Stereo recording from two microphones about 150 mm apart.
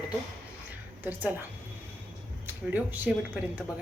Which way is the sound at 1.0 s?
10° right (ahead or behind).